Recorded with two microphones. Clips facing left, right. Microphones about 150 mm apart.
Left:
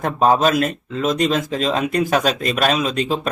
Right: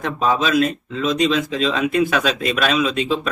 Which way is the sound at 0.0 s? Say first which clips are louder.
Left 4 dB; 45° left (ahead or behind).